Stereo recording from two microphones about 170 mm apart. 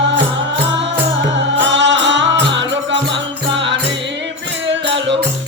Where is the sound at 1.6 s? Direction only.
90° right.